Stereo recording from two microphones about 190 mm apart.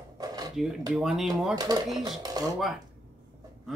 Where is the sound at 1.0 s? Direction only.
Centre (ahead or behind).